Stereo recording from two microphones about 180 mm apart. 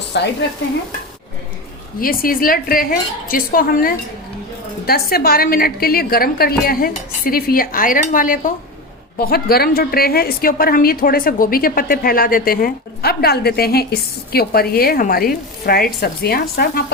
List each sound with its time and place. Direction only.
0.1 s stir: 70° left (ahead or behind)
2.0 s a woman's voice: 50° left (ahead or behind)